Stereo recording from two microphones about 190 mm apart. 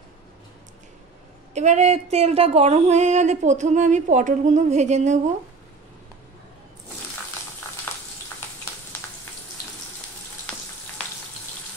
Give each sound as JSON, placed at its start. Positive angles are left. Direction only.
{"t": 1.5, "sound": "speech", "side_deg": -35}